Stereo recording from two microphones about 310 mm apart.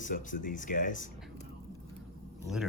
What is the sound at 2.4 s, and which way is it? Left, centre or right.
Speech, centre.